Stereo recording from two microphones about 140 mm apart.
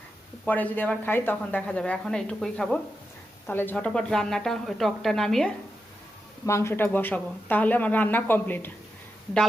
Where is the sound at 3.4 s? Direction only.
15° left (ahead or behind).